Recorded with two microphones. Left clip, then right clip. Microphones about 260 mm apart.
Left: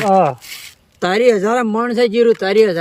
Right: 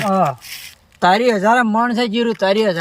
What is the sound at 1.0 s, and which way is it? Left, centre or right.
Speech, centre.